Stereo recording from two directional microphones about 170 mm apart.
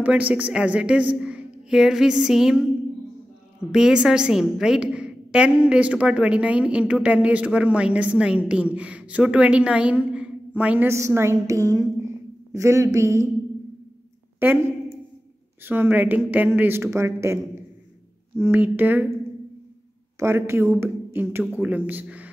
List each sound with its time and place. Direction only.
0.0 s a woman's voice: 10° right (ahead or behind)
1.2 s a sound: 5° right (ahead or behind)
3.7 s a woman's voice: 5° right (ahead or behind)
14.4 s speech: 15° right (ahead or behind)
15.6 s a woman's voice: 10° right (ahead or behind)
18.4 s a woman's voice: 10° right (ahead or behind)
20.2 s a woman's voice: 15° right (ahead or behind)